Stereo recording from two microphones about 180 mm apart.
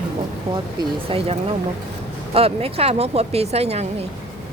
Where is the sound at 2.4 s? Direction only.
35° right (ahead or behind).